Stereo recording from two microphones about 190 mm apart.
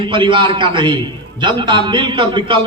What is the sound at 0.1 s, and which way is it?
A man's voice, 25° right (ahead or behind).